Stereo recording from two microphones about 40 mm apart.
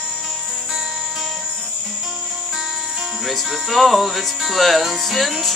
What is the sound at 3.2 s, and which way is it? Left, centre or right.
Music, centre.